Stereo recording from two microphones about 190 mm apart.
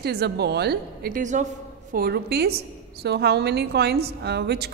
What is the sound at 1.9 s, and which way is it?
A woman's voice, 55° right (ahead or behind).